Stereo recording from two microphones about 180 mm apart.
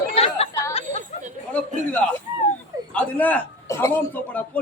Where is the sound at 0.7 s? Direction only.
35° left (ahead or behind).